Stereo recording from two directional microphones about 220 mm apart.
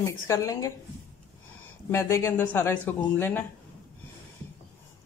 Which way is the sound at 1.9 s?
10° left (ahead or behind).